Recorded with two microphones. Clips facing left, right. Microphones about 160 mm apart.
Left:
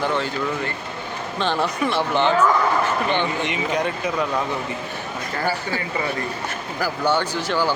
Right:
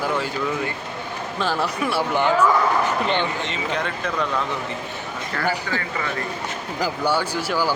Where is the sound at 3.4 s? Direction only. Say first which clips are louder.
Left 3 dB; 15° left (ahead or behind).